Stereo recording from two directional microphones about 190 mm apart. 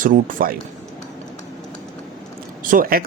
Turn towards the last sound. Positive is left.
turn(degrees=-50)  # may be behind; listen again after turning